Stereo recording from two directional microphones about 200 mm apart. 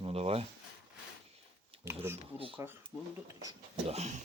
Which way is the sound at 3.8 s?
35° right (ahead or behind).